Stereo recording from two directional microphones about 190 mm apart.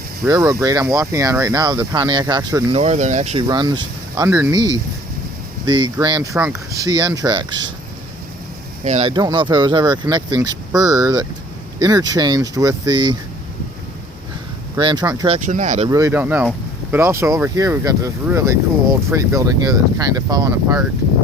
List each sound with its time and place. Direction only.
0.3 s speech: 15° right (ahead or behind)
2.7 s speech: 35° right (ahead or behind)
3.4 s speech: 20° right (ahead or behind)
8.8 s speech: 35° right (ahead or behind)
14.8 s speech: 25° right (ahead or behind)
15.4 s speech: 40° right (ahead or behind)
15.9 s speech: 15° right (ahead or behind)